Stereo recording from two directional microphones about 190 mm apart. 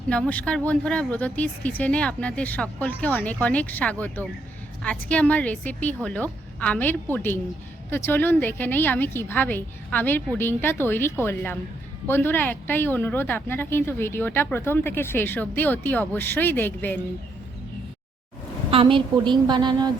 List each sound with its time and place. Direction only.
0.1 s speech: 5° left (ahead or behind)
18.7 s a woman's voice: 30° right (ahead or behind)